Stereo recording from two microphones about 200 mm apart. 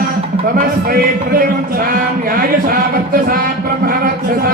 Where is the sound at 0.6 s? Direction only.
45° right (ahead or behind).